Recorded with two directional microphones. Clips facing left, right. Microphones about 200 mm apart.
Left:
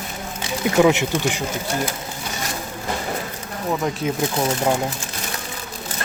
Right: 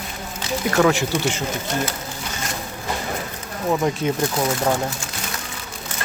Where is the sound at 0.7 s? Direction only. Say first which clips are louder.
Left 2 dB; 20° left (ahead or behind).